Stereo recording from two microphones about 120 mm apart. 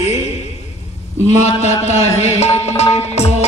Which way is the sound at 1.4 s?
65° left (ahead or behind).